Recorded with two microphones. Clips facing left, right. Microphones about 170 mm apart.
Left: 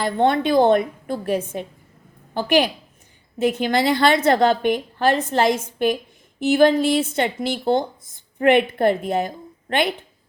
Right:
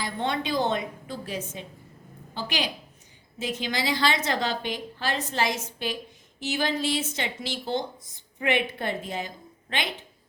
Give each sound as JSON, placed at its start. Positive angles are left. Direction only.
{"t": 0.0, "sound": "a woman's voice", "side_deg": 55}